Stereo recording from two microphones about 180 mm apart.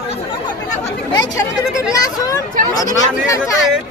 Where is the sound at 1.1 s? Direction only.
20° left (ahead or behind).